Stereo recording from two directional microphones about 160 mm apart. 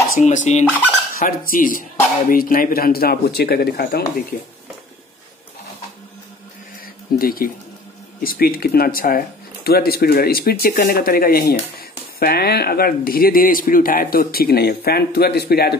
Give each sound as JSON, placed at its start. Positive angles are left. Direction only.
{"t": 0.2, "sound": "a sound", "side_deg": 50}
{"t": 1.1, "sound": "speech", "side_deg": 60}
{"t": 7.2, "sound": "speech", "side_deg": 65}
{"t": 12.2, "sound": "speech", "side_deg": 80}